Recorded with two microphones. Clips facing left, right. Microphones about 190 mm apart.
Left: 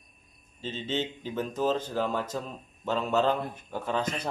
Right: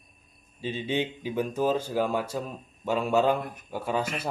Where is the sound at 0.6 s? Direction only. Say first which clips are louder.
Right 3 dB; 10° right (ahead or behind).